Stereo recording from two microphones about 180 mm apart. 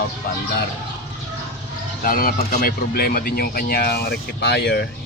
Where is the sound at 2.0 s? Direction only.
55° left (ahead or behind).